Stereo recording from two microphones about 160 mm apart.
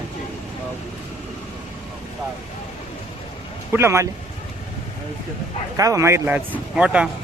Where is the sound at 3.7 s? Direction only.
15° right (ahead or behind).